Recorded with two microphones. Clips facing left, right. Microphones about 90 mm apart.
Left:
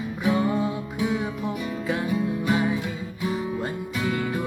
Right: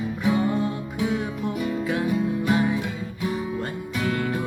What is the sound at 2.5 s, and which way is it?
Music, centre (ahead or behind).